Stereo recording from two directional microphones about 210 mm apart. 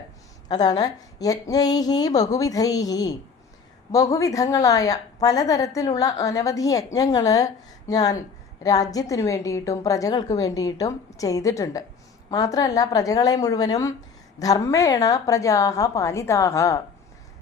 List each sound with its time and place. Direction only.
0.4 s a woman's voice: 20° left (ahead or behind)